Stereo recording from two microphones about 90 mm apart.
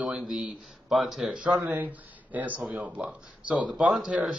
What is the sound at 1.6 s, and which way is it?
Speech, 20° right (ahead or behind).